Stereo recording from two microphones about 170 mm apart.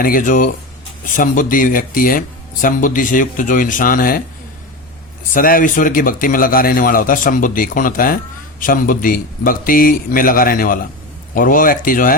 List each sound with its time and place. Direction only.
0.0 s speech: 55° left (ahead or behind)
5.3 s a man's voice: 55° left (ahead or behind)